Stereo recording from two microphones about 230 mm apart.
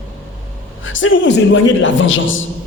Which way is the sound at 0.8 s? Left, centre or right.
Left.